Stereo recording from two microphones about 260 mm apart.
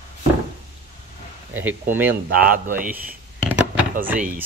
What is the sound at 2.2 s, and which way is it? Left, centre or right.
Speech, right.